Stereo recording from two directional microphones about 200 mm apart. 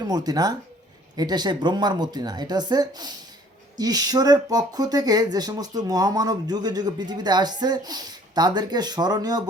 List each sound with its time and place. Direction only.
0.1 s speech: 20° right (ahead or behind)